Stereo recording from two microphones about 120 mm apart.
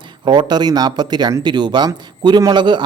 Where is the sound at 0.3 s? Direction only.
40° right (ahead or behind).